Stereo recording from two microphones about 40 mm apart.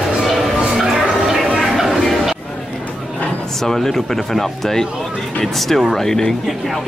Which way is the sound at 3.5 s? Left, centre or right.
Centre.